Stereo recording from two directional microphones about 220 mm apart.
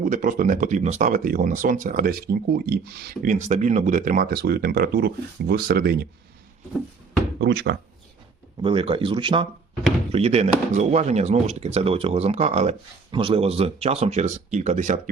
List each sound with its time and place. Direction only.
0.0 s speech: 35° right (ahead or behind)
7.3 s speech: 50° right (ahead or behind)
8.6 s speech: 25° right (ahead or behind)